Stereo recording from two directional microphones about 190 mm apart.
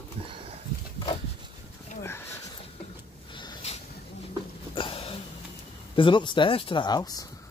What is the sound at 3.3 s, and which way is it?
Snort, 25° left (ahead or behind).